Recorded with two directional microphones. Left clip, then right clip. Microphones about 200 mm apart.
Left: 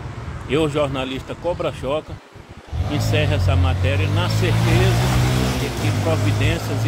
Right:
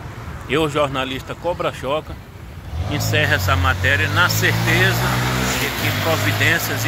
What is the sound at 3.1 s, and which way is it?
Speech, 5° left (ahead or behind).